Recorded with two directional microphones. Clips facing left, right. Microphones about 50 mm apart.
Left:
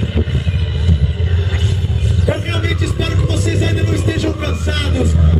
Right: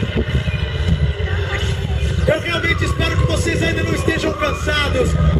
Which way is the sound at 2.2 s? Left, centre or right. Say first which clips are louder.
Right 4 dB; right.